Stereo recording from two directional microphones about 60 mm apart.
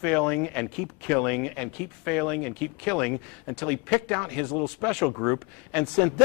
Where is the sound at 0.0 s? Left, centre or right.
Centre.